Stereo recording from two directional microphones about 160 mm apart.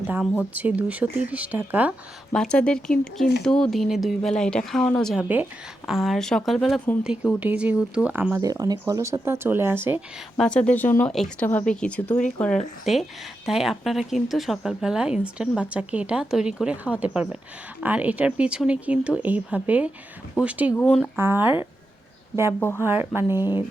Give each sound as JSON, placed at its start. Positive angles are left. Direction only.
{"t": 0.1, "sound": "speech", "side_deg": -10}
{"t": 2.3, "sound": "speech", "side_deg": 5}
{"t": 8.4, "sound": "speech", "side_deg": -20}
{"t": 10.3, "sound": "speech", "side_deg": 5}
{"t": 11.1, "sound": "speech", "side_deg": 0}
{"t": 20.7, "sound": "speech", "side_deg": 5}
{"t": 21.2, "sound": "speech", "side_deg": -15}
{"t": 22.8, "sound": "speech", "side_deg": -15}